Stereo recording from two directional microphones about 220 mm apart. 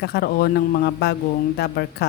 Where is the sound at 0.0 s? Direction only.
45° left (ahead or behind).